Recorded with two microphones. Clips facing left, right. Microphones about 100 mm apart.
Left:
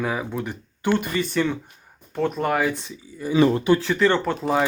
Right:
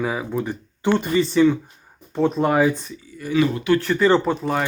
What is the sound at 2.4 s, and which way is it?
Speech, 10° right (ahead or behind).